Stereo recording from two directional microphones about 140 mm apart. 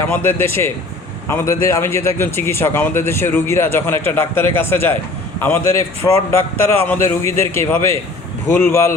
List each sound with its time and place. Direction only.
0.1 s a man's voice: 15° left (ahead or behind)